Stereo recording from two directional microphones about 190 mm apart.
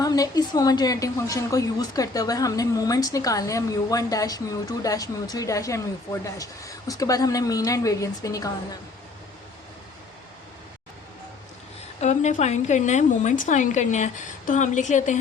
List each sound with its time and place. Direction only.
0.0 s a woman's voice: 20° left (ahead or behind)
11.9 s a woman's voice: 40° left (ahead or behind)